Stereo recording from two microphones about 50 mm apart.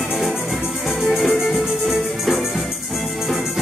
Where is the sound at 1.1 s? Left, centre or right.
Centre.